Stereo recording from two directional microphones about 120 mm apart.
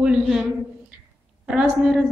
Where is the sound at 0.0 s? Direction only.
5° right (ahead or behind).